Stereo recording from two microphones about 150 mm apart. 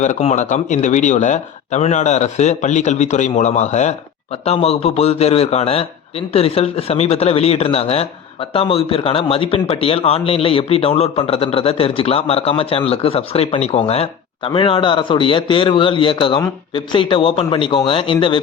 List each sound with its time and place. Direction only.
0.0 s speech: 50° left (ahead or behind)